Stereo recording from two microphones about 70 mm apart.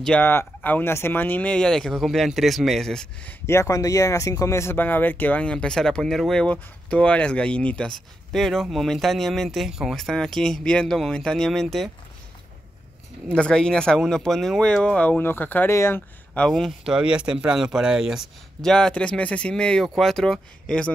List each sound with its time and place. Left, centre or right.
0.2 s speech: left
1.5 s speech: centre
3.4 s speech: left
4.7 s speech: left; by 6.4 s centre
6.4 s speech: centre
9.9 s speech: centre
13.3 s speech: centre
15.0 s speech: left
15.7 s speech: left
16.8 s speech: centre
18.6 s speech: centre